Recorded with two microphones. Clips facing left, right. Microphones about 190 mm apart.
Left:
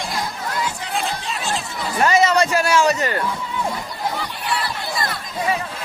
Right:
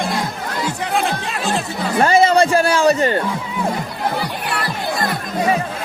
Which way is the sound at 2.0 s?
30° right (ahead or behind).